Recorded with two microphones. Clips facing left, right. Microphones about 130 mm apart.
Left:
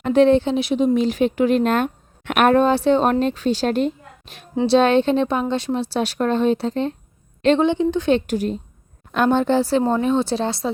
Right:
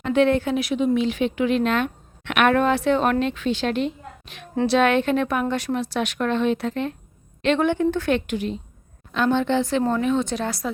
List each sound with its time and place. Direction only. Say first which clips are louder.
0.0 s speech: left 4 dB; 35° left (ahead or behind)
4.6 s a woman's voice: left 3 dB; 30° left (ahead or behind)
7.6 s a woman's voice: left 2 dB; 20° left (ahead or behind)
8.1 s speech: left 4 dB; 40° left (ahead or behind)